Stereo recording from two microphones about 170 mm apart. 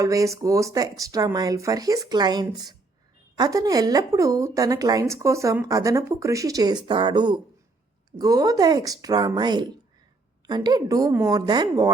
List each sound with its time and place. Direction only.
0.0 s a woman's voice: 20° right (ahead or behind)